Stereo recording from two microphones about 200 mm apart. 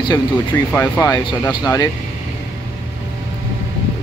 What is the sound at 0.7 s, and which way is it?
Speech, 10° left (ahead or behind).